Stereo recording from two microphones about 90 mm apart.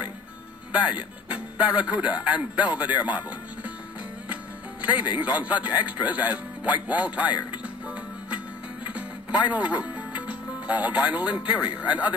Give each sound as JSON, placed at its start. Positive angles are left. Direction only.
{"t": 0.7, "sound": "speech", "side_deg": -15}
{"t": 4.8, "sound": "speech", "side_deg": -20}
{"t": 7.6, "sound": "music", "side_deg": -15}
{"t": 11.8, "sound": "speech", "side_deg": -15}